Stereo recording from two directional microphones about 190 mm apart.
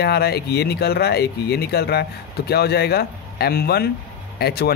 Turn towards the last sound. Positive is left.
turn(degrees=55)  # may be behind; listen again after turning